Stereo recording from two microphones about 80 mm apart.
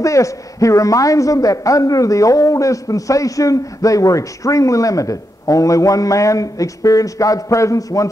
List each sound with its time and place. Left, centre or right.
0.0 s a man's voice: left